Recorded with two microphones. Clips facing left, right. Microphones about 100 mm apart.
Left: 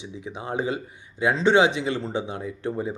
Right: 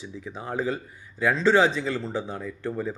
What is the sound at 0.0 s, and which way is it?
Speech, 20° left (ahead or behind).